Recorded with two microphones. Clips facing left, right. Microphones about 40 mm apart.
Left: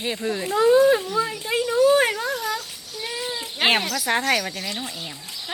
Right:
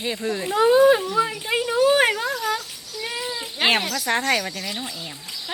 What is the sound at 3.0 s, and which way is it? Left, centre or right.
Cat, right.